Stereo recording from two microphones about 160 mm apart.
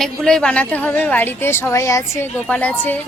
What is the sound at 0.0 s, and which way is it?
A woman's voice, 5° left (ahead or behind).